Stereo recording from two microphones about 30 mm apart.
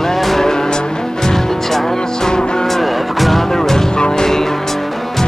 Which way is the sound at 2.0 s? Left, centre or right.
Left.